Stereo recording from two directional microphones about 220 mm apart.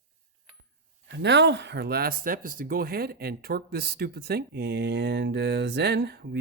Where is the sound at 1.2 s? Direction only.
55° right (ahead or behind).